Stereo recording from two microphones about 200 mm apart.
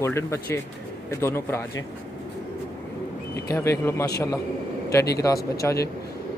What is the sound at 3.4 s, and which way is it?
Speech, 15° left (ahead or behind).